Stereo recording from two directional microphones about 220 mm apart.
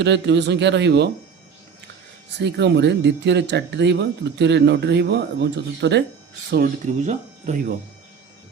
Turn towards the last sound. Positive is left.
turn(degrees=-35)  # may be behind; listen again after turning